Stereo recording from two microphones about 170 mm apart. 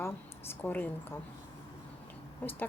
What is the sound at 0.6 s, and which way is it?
Speech, 10° left (ahead or behind).